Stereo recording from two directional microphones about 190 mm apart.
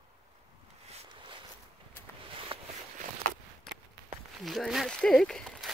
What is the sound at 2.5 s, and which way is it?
Walk, 30° right (ahead or behind).